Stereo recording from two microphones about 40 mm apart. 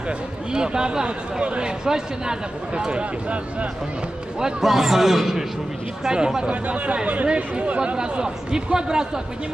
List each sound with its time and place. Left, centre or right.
0.5 s speech: centre
1.0 s speech: right
1.9 s speech: centre
4.6 s a man's voice: centre
6.0 s speech: centre
6.5 s speech: right; by 9.2 s centre